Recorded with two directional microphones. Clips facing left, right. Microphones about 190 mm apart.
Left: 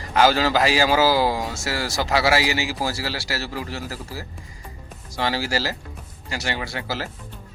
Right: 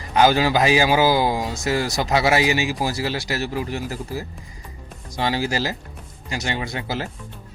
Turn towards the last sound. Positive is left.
turn(degrees=-20)  # may be behind; listen again after turning